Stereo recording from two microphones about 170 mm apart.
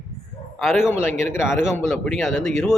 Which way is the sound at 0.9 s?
15° left (ahead or behind).